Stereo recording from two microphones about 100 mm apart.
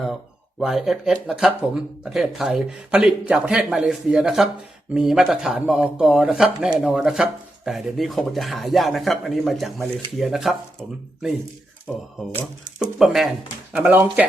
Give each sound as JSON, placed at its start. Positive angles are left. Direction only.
{"t": 0.6, "sound": "speech", "side_deg": -5}
{"t": 12.8, "sound": "speech", "side_deg": -5}
{"t": 13.7, "sound": "speech", "side_deg": -20}